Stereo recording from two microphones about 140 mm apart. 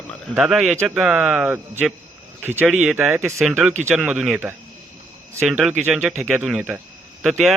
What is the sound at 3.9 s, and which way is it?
Speech, 5° right (ahead or behind).